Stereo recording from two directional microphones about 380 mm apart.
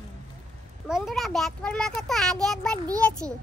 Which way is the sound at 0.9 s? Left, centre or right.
Centre.